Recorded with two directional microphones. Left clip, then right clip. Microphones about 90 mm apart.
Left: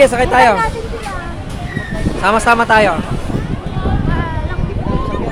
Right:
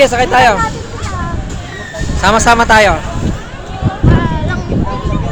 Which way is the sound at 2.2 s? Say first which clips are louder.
Right 3 dB; 30° right (ahead or behind).